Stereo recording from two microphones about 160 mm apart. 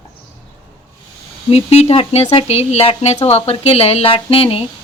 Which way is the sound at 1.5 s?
40° left (ahead or behind).